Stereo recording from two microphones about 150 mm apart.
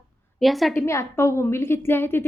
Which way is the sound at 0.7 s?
15° left (ahead or behind).